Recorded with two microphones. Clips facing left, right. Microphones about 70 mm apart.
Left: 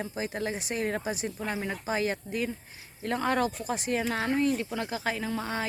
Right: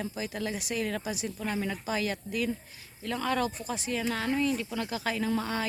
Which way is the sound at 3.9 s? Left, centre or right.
Left.